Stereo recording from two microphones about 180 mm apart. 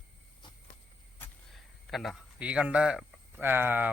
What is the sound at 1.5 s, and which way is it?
Speech, centre (ahead or behind).